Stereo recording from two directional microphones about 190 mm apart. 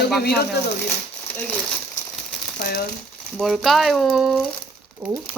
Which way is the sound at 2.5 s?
60° left (ahead or behind).